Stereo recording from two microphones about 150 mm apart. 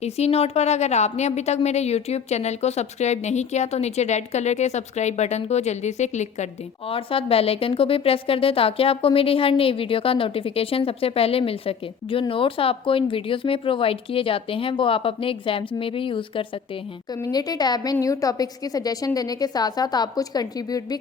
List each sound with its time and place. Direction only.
0.0 s a woman's voice: 45° left (ahead or behind); by 21.0 s 25° left (ahead or behind)